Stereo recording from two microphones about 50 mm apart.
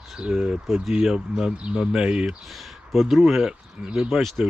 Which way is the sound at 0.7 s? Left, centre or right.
Centre.